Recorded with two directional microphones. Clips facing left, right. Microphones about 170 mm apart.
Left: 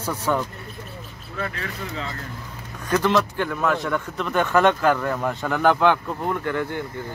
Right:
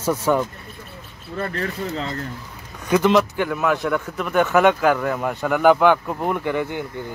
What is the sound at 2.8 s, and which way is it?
Speech, 15° right (ahead or behind).